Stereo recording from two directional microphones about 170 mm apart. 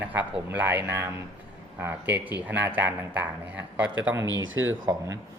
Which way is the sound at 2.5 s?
10° right (ahead or behind).